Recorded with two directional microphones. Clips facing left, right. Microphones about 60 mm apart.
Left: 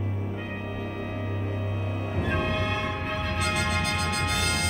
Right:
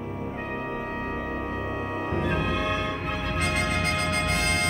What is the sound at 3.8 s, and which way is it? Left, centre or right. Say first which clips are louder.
Music: right 2 dB; right.